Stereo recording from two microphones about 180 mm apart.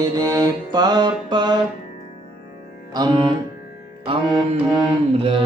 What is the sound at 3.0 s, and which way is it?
Music, 20° right (ahead or behind).